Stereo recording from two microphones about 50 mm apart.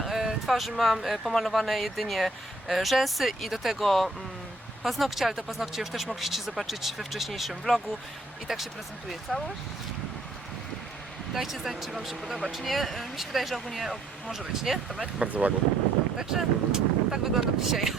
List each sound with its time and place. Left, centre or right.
0.0 s speech: centre
9.3 s speech: centre
11.3 s speech: centre
15.0 s speech: right
16.1 s speech: centre